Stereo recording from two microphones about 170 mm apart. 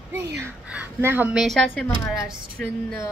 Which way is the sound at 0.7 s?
10° right (ahead or behind).